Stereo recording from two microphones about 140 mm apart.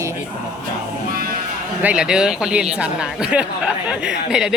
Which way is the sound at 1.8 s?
5° right (ahead or behind).